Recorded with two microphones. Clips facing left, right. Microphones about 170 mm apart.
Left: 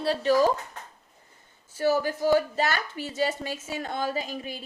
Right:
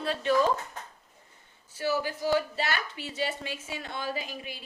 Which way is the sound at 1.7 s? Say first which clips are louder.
Left 5 dB; 45° left (ahead or behind).